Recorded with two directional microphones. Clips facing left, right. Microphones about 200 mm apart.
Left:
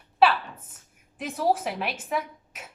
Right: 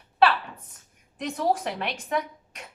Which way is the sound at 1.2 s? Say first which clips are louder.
Even; 5° left (ahead or behind).